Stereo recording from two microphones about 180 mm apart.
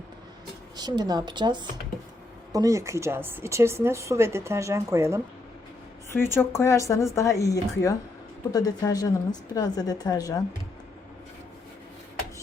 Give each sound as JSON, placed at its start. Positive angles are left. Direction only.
{"t": 0.8, "sound": "a woman's voice", "side_deg": -20}
{"t": 6.1, "sound": "a woman's voice", "side_deg": 15}